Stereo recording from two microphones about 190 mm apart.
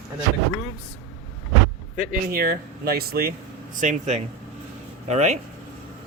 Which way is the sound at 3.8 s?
40° right (ahead or behind).